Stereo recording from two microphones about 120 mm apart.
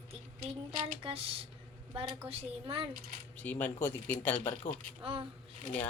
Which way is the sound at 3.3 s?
15° left (ahead or behind).